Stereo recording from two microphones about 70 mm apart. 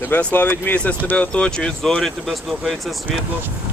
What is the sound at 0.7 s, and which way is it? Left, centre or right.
Speech, centre.